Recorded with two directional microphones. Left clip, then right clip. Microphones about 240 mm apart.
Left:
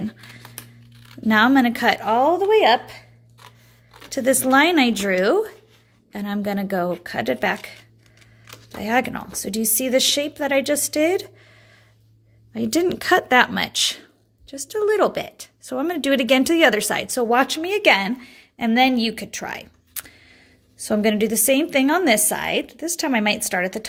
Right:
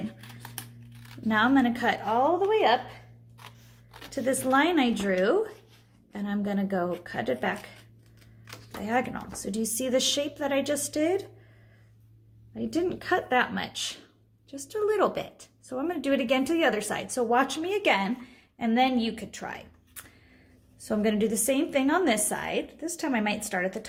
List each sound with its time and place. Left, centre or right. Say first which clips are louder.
0.2 s scissors: left 3 dB; centre
1.3 s speech: left 7 dB; left
3.4 s scissors: left 2 dB; centre
4.1 s speech: left 8 dB; left
8.8 s speech: left 7 dB; left
12.5 s speech: left 8 dB; left